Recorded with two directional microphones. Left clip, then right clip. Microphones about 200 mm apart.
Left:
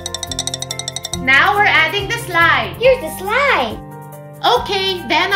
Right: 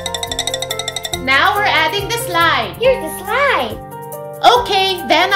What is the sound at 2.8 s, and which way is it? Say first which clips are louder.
Speech: left 2 dB; centre (ahead or behind).